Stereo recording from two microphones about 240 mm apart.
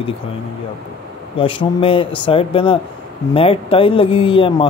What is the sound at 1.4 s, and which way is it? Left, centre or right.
Speech, left.